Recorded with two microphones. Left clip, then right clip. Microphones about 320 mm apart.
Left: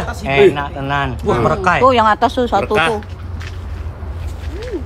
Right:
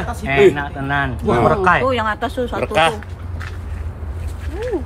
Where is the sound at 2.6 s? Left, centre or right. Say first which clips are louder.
Left 1 dB; centre.